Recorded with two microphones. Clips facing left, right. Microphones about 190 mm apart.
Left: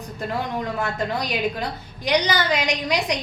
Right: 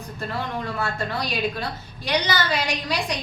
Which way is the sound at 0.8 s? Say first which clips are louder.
Left 1 dB; 15° left (ahead or behind).